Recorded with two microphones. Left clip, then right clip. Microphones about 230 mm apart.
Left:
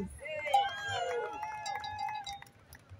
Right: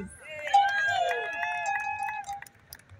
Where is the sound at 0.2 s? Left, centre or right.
Right.